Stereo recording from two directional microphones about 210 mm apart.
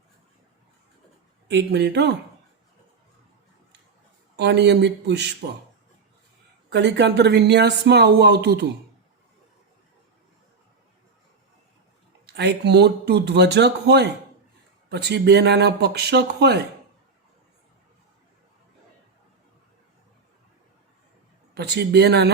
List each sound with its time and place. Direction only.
1.5 s speech: 55° right (ahead or behind)
4.4 s speech: 55° right (ahead or behind)
6.7 s speech: 55° right (ahead or behind)
12.2 s speech: 55° right (ahead or behind)
21.5 s speech: 55° right (ahead or behind)